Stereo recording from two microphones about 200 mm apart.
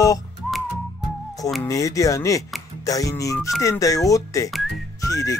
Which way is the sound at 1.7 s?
15° left (ahead or behind).